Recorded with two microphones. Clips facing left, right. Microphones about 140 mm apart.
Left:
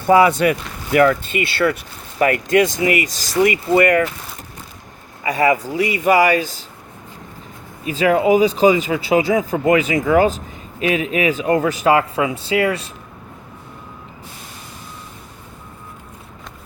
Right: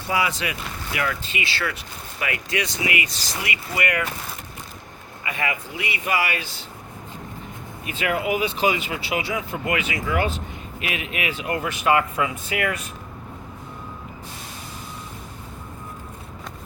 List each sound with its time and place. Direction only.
0.1 s speech: 50° left (ahead or behind)
5.2 s speech: 40° left (ahead or behind)
7.9 s speech: 35° left (ahead or behind)